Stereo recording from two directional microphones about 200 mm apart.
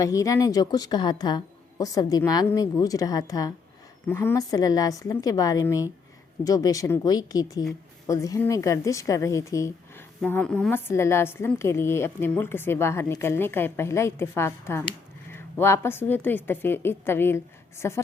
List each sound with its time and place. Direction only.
0.0 s a woman's voice: 15° left (ahead or behind)